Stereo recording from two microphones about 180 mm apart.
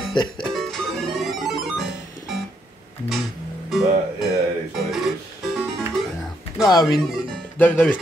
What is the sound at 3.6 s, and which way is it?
Music, centre (ahead or behind).